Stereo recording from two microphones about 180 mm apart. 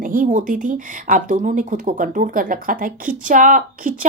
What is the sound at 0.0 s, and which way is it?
Speech, 50° right (ahead or behind).